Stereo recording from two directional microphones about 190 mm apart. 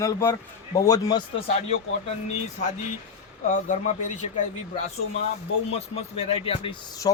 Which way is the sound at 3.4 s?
40° left (ahead or behind).